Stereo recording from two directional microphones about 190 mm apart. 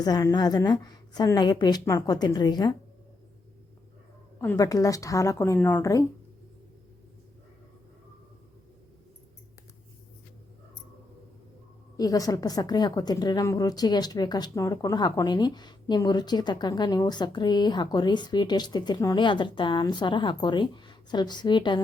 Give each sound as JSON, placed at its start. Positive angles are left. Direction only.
{"t": 0.0, "sound": "a woman's voice", "side_deg": 20}
{"t": 4.4, "sound": "a woman's voice", "side_deg": 15}
{"t": 11.9, "sound": "a woman's voice", "side_deg": 20}